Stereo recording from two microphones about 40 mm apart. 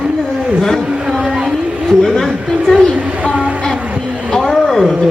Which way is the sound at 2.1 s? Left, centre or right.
Centre.